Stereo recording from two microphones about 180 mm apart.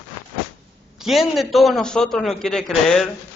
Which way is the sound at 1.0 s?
Centre (ahead or behind).